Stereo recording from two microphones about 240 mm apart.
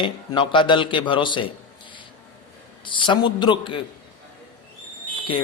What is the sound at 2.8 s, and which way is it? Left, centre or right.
Speech, centre.